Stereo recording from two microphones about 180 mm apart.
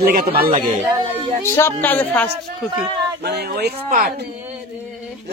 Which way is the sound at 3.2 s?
60° right (ahead or behind).